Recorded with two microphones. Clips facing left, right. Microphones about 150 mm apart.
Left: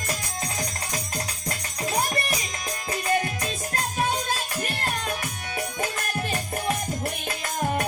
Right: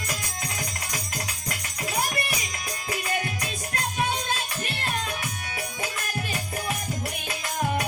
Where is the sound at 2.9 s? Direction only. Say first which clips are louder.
Left 4 dB; 35° left (ahead or behind).